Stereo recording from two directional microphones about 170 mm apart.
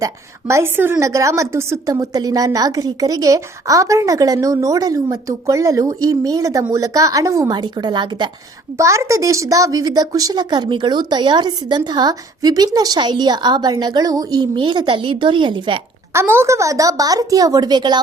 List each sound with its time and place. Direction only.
0.0 s a woman's voice: 15° right (ahead or behind)
16.1 s a woman's voice: 15° right (ahead or behind)